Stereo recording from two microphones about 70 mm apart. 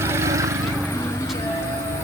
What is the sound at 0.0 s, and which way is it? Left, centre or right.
Vehicle, right.